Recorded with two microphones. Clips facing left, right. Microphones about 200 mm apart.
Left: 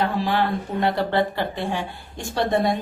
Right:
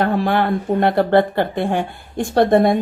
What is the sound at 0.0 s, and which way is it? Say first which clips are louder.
Speech: right 5 dB; 55° right (ahead or behind).